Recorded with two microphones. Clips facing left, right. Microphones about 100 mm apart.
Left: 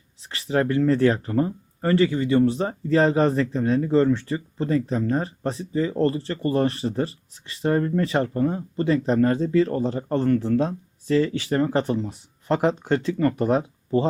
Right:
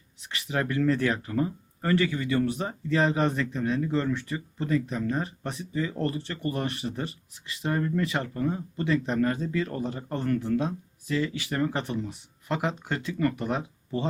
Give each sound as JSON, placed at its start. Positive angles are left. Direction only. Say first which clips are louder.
{"t": 0.2, "sound": "speech", "louder": "left 7 dB", "side_deg": 30}